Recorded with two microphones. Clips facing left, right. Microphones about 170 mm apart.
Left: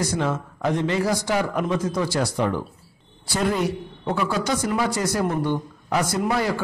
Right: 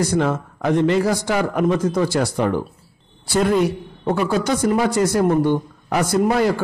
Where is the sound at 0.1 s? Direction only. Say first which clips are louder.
Right 5 dB; 55° right (ahead or behind).